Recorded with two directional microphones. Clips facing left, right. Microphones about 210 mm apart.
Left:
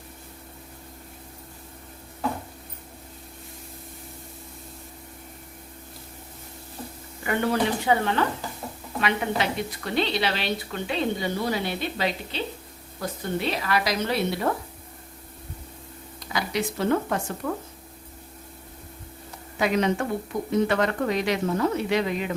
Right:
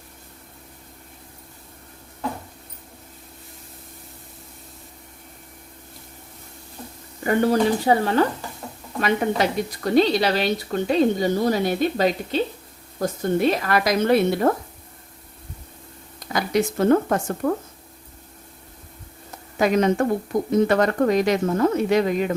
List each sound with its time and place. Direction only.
7.3 s a woman's voice: 40° right (ahead or behind)
16.3 s speech: 45° right (ahead or behind)
19.5 s a woman's voice: 45° right (ahead or behind)